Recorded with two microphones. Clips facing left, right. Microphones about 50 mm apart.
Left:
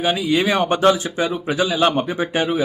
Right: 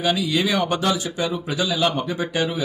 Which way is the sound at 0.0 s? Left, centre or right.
Left.